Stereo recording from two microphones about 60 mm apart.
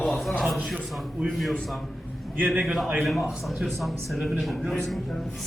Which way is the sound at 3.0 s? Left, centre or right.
Centre.